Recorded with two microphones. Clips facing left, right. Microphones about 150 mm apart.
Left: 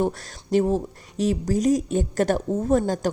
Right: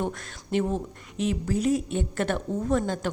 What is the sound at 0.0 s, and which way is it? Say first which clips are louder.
Speech: left 6 dB; 35° left (ahead or behind).